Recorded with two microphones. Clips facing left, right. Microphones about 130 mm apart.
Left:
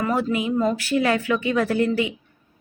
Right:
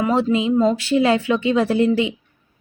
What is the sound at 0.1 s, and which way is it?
Speech, 25° right (ahead or behind).